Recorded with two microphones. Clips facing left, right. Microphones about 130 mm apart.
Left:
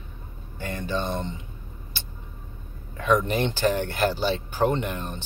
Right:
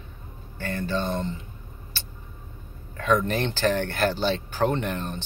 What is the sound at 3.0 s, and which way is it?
Speech, 15° left (ahead or behind).